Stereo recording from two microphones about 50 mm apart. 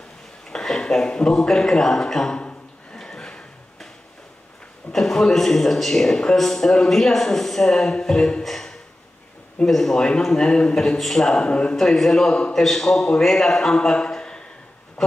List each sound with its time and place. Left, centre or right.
0.5 s a man's voice: centre
2.3 s a sound: centre
4.9 s a man's voice: centre
11.3 s speech: centre
11.7 s speech: centre